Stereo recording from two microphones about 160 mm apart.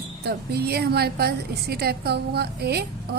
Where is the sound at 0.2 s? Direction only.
90° right.